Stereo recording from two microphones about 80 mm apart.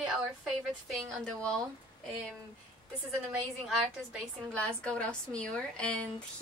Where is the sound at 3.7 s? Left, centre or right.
Centre.